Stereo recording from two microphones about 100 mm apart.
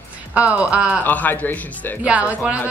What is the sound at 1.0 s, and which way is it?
Speech, 15° left (ahead or behind).